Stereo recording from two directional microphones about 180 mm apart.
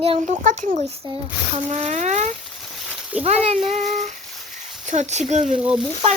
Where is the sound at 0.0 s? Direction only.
40° right (ahead or behind).